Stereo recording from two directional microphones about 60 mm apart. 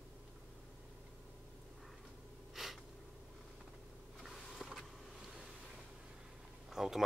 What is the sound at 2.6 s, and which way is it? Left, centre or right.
Gasp, centre.